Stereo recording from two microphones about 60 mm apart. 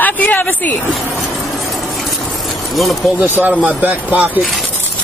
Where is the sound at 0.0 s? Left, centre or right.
Left.